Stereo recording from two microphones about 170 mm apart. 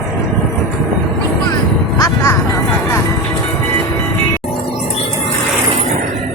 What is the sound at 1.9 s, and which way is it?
Music, 20° left (ahead or behind).